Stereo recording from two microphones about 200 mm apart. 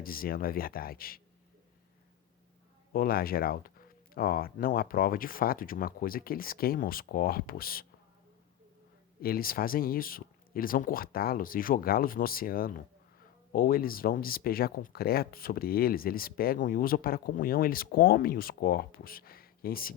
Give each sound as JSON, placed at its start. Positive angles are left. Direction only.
{"t": 0.0, "sound": "speech", "side_deg": 45}
{"t": 2.9, "sound": "speech", "side_deg": 45}
{"t": 9.2, "sound": "speech", "side_deg": 45}